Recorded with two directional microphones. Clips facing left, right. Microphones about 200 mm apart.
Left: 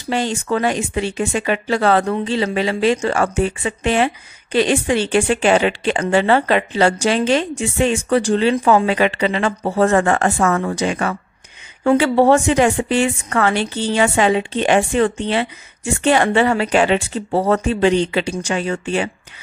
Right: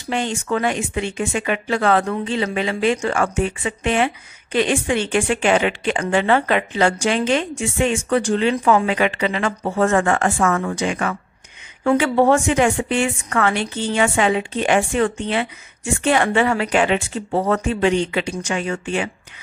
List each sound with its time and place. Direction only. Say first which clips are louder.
0.1 s speech: left 2 dB; 35° left (ahead or behind)